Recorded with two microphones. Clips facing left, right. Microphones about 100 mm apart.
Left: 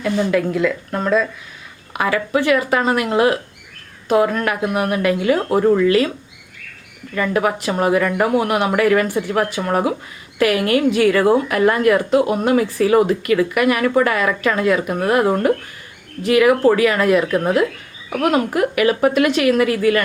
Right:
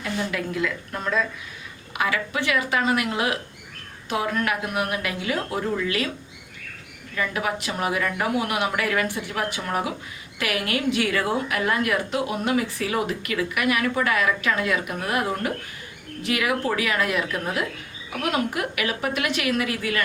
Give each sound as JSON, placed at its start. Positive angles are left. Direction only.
{"t": 0.0, "sound": "a woman's voice", "side_deg": 50}
{"t": 7.2, "sound": "a woman's voice", "side_deg": 45}